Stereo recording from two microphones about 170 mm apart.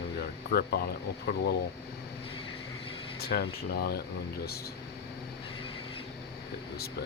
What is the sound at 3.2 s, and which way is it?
Speech, 65° left (ahead or behind).